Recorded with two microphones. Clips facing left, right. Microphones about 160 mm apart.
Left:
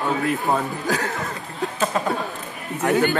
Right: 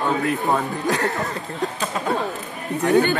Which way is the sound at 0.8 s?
Centre (ahead or behind).